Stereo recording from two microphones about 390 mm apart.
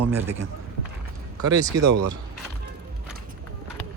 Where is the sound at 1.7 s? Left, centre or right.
Right.